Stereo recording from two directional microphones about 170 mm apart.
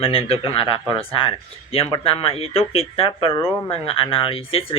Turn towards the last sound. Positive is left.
turn(degrees=35)  # may be behind; listen again after turning